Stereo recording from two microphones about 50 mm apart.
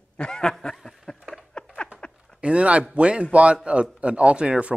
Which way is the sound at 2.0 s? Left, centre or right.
Centre.